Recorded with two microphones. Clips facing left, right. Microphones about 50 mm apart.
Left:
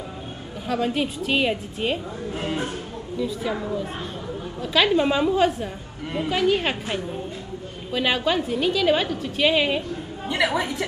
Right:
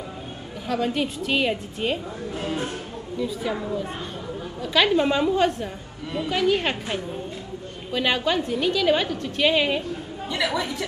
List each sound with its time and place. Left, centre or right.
0.7 s a woman's voice: centre
2.3 s speech: left
3.2 s a woman's voice: centre
10.2 s a woman's voice: left